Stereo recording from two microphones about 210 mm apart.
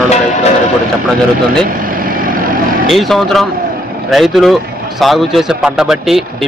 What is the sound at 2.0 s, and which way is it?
Vehicle, 40° right (ahead or behind).